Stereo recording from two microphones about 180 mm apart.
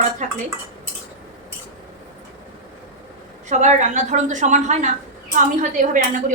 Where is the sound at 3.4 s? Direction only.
40° right (ahead or behind).